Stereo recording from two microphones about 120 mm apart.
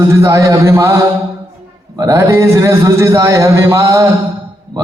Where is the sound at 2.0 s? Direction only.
25° right (ahead or behind).